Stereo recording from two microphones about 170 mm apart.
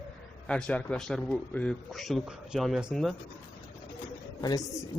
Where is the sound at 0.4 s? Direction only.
5° left (ahead or behind).